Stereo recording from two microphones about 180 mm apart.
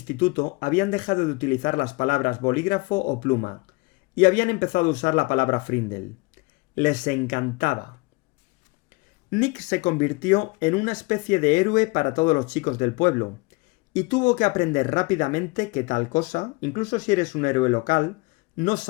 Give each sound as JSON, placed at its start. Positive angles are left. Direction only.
{"t": 0.1, "sound": "speech", "side_deg": 50}
{"t": 9.3, "sound": "speech", "side_deg": 45}